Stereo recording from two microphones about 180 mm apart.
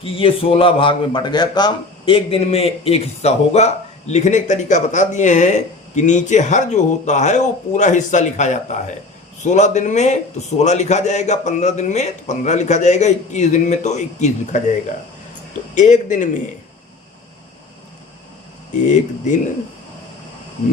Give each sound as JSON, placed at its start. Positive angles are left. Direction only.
{"t": 0.0, "sound": "a man's voice", "side_deg": 30}
{"t": 15.7, "sound": "speech", "side_deg": 45}